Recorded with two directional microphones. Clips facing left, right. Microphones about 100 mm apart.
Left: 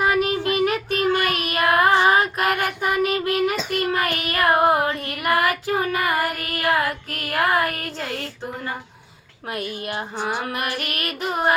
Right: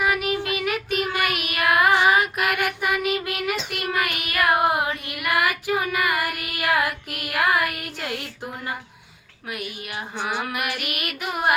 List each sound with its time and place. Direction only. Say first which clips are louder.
0.0 s child singing: left 3 dB; 35° left (ahead or behind)
4.9 s carnatic music: left 4 dB; 40° left (ahead or behind)
5.7 s child singing: left 2 dB; 35° left (ahead or behind)
7.3 s a sound: left 2 dB; 40° left (ahead or behind)
9.8 s child singing: left 1 dB; 40° left (ahead or behind)